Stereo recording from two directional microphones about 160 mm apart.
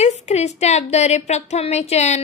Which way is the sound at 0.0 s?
45° left (ahead or behind).